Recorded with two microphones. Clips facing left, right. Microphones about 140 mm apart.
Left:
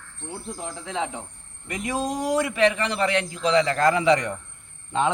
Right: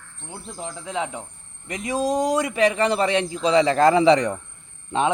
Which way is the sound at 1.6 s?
20° right (ahead or behind).